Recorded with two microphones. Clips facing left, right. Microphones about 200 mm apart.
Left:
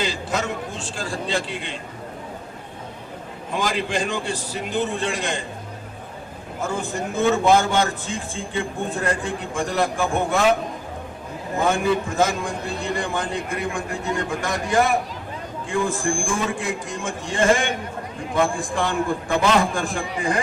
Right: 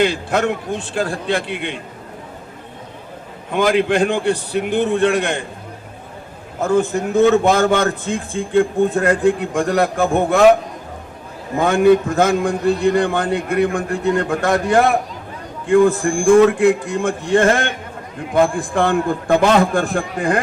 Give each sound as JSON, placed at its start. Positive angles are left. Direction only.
{"t": 0.0, "sound": "a man's voice", "side_deg": -60}
{"t": 3.5, "sound": "a man's voice", "side_deg": -60}
{"t": 6.6, "sound": "a man's voice", "side_deg": -60}
{"t": 11.6, "sound": "a man's voice", "side_deg": -60}